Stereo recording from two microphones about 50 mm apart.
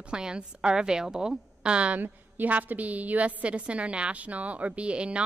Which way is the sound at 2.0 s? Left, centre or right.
Right.